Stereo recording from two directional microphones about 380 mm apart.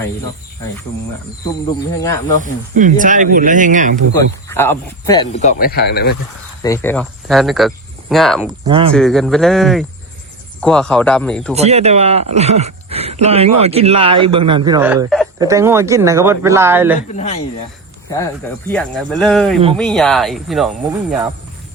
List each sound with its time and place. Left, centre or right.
2.4 s speech: centre
4.1 s speech: centre; by 6.1 s left
6.6 s speech: centre
8.6 s speech: centre
8.9 s speech: centre
11.5 s speech: centre
17.1 s speech: centre
18.7 s speech: centre